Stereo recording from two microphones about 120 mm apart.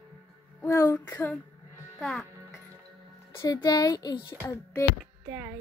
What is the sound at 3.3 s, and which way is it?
Speech, 30° left (ahead or behind).